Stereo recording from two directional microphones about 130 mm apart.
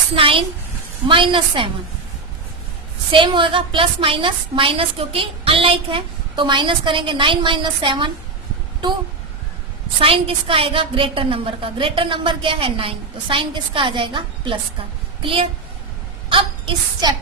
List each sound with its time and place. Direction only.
0.2 s a woman's voice: 45° right (ahead or behind)
3.1 s a woman's voice: 40° right (ahead or behind)
10.0 s a woman's voice: 45° right (ahead or behind)
16.3 s child singing: 35° right (ahead or behind)